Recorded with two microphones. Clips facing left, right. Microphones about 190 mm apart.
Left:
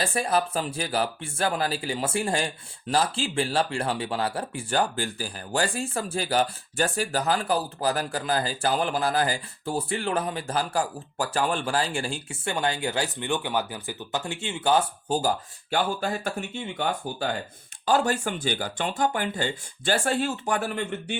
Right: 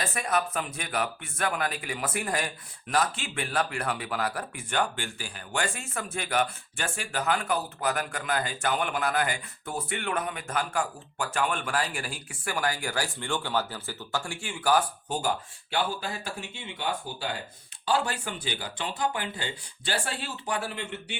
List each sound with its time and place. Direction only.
0.0 s speech: 30° left (ahead or behind)
15.2 s speech: 40° left (ahead or behind)